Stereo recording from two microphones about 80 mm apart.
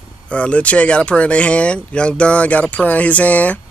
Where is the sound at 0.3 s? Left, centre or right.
Centre.